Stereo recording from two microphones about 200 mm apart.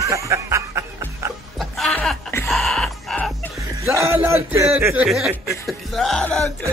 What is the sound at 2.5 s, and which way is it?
Music, centre (ahead or behind).